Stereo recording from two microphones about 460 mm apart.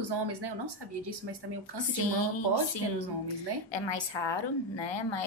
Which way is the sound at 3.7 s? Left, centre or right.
Left.